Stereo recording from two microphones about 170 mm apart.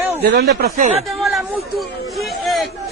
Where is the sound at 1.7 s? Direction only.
Centre (ahead or behind).